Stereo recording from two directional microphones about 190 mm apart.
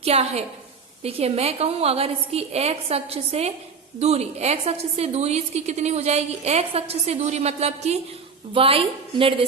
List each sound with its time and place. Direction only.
0.0 s a woman's voice: 35° right (ahead or behind)